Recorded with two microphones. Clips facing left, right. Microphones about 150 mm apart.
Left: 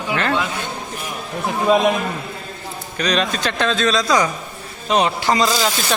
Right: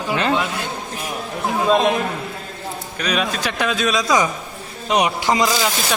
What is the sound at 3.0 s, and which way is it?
Speech, 10° right (ahead or behind).